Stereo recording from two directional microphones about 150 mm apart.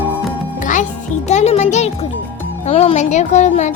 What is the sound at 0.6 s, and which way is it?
Music, 60° left (ahead or behind).